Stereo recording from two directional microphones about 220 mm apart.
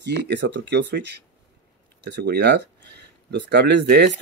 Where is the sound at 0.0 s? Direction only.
50° right (ahead or behind).